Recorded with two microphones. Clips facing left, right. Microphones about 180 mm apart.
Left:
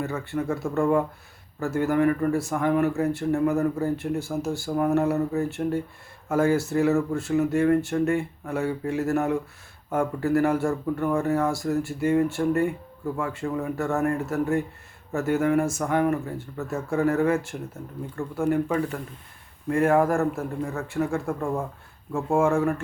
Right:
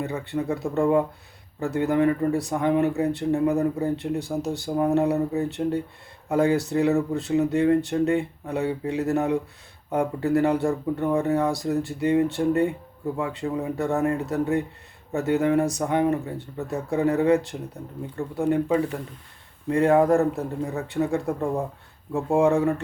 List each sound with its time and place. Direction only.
0.0 s speech: 20° right (ahead or behind)